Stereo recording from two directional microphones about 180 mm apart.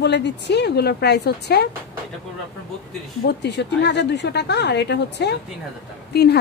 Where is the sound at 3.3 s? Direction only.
70° left (ahead or behind).